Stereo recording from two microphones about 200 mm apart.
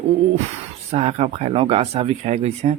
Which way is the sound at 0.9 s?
35° right (ahead or behind).